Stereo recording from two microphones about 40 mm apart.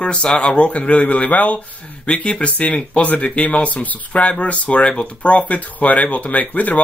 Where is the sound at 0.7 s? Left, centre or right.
Left.